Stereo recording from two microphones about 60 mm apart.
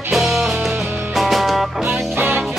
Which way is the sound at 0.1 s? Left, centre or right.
Centre.